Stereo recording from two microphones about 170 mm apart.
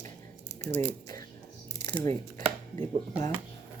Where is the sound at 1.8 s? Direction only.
25° left (ahead or behind).